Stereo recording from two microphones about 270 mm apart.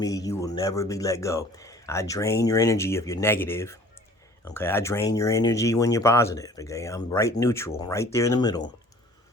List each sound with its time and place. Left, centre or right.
0.0 s a man's voice: centre